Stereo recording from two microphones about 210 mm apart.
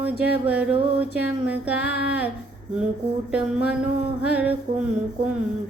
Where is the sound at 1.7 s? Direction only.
55° left (ahead or behind).